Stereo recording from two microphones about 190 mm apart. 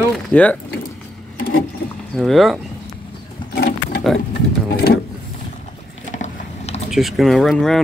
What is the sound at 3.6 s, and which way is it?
Wild animals, 55° left (ahead or behind).